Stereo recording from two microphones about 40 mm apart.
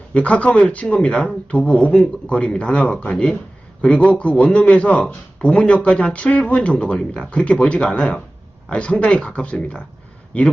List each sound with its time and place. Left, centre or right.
0.1 s speech: left